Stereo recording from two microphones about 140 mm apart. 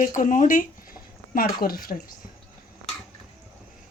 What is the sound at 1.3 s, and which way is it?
Speech, 90° left.